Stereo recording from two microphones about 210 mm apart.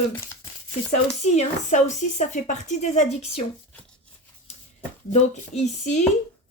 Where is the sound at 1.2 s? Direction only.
35° left (ahead or behind).